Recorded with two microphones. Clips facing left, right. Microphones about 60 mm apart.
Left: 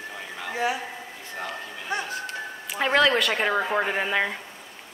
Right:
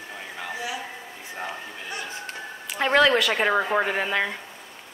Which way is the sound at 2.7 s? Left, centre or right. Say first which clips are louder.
Right 2 dB; centre.